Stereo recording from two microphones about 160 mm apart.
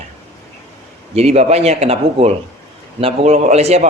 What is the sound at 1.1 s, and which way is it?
Speech, 40° right (ahead or behind).